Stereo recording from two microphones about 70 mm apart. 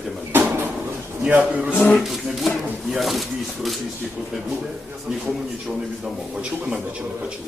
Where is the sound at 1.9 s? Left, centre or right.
Centre.